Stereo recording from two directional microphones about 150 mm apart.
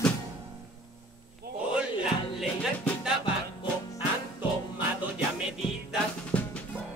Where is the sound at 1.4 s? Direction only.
90° right.